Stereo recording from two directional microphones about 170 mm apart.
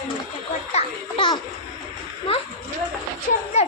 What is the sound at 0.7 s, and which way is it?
Speech, 40° left (ahead or behind).